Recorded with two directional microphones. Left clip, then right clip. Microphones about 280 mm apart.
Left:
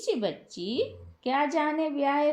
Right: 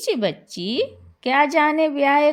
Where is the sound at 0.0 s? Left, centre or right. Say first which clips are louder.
Right 7 dB; right.